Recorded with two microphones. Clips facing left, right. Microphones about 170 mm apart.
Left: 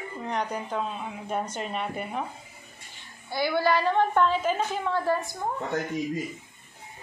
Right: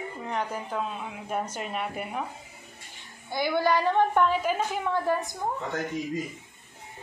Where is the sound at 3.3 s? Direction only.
20° right (ahead or behind).